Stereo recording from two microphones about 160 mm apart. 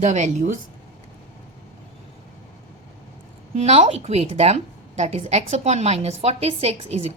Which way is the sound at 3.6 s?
45° right (ahead or behind).